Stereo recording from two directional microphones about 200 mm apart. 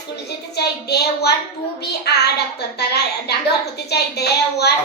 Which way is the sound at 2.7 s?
55° left (ahead or behind).